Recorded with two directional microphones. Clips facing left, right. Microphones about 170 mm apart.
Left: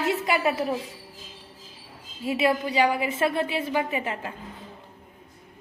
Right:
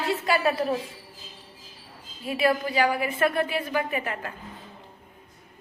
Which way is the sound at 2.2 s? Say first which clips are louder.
Left 1 dB; 20° left (ahead or behind).